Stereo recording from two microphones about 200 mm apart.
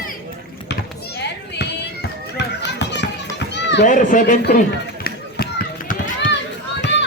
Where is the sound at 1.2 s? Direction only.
60° left (ahead or behind).